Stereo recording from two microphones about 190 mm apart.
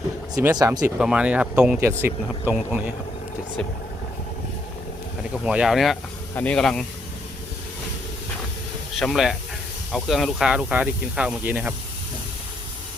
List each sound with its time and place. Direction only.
0.4 s speech: 20° right (ahead or behind)
0.9 s speech: 5° right (ahead or behind)
5.2 s speech: 5° right (ahead or behind)
9.0 s speech: centre (ahead or behind)